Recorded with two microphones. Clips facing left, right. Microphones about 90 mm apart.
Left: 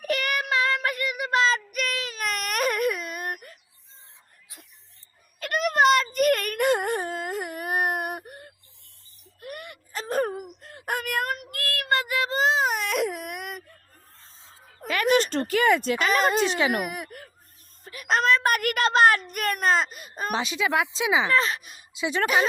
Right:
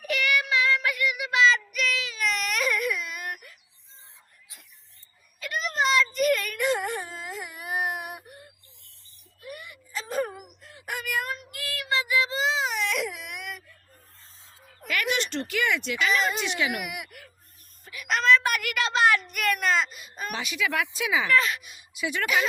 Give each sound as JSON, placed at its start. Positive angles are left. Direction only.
{"t": 0.1, "sound": "child singing", "side_deg": 40}
{"t": 5.4, "sound": "a sound", "side_deg": 55}
{"t": 6.1, "sound": "whimper", "side_deg": 50}
{"t": 14.8, "sound": "speech", "side_deg": 35}
{"t": 17.8, "sound": "whimper", "side_deg": 40}
{"t": 21.9, "sound": "speech", "side_deg": 30}